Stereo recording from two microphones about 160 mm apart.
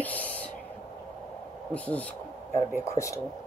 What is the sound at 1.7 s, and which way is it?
Speech, 10° left (ahead or behind).